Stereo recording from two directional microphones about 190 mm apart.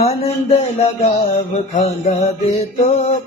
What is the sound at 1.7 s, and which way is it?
Music, 35° left (ahead or behind).